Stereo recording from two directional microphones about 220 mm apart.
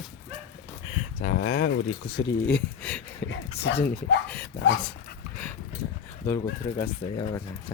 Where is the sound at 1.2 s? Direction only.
55° left (ahead or behind).